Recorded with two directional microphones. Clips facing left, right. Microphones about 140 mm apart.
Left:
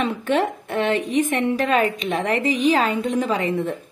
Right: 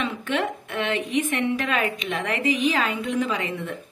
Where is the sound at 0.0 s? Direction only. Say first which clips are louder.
Left 5 dB; 35° left (ahead or behind).